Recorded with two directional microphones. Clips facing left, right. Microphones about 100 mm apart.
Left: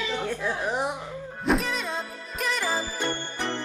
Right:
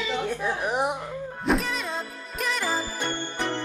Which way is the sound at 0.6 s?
20° right (ahead or behind).